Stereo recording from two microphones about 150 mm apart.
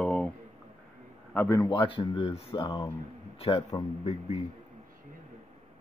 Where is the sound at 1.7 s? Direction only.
35° left (ahead or behind).